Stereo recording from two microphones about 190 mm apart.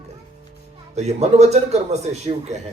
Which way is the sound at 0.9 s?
35° right (ahead or behind).